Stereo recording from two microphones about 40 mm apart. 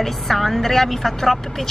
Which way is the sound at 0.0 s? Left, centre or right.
Centre.